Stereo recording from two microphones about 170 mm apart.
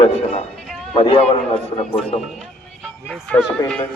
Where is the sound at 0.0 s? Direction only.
40° left (ahead or behind).